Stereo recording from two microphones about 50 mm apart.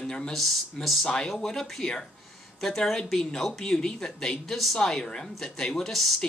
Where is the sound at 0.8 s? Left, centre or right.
Centre.